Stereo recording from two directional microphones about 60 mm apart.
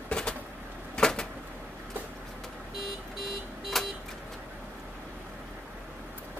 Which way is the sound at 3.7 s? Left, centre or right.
Centre.